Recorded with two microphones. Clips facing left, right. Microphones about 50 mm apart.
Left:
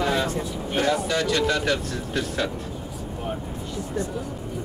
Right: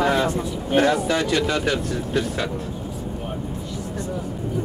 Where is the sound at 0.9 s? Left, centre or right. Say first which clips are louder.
Right 2 dB; centre.